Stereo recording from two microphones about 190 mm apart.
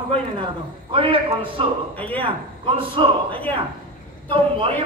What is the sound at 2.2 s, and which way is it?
A man's voice, 25° right (ahead or behind).